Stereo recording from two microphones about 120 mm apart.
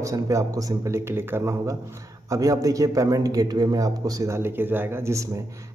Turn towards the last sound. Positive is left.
turn(degrees=-25)  # may be behind; listen again after turning